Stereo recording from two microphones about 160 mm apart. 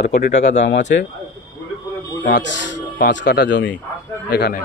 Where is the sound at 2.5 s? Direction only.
85° left.